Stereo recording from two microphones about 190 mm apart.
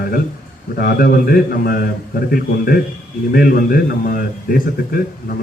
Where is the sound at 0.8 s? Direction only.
50° left (ahead or behind).